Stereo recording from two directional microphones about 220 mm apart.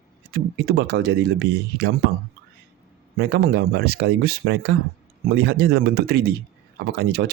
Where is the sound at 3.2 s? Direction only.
45° right (ahead or behind).